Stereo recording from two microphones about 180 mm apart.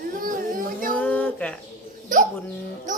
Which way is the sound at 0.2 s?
50° right (ahead or behind).